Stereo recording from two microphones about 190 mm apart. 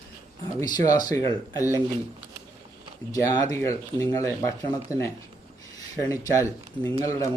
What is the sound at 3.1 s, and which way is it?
Speech, 20° left (ahead or behind).